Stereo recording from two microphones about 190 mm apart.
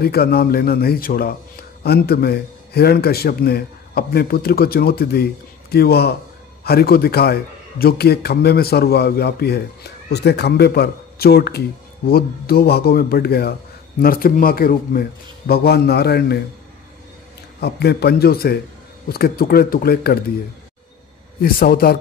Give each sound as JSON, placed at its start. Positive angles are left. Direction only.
{"t": 0.0, "sound": "a man's voice", "side_deg": 55}
{"t": 17.6, "sound": "a man's voice", "side_deg": 60}
{"t": 21.4, "sound": "speech", "side_deg": 50}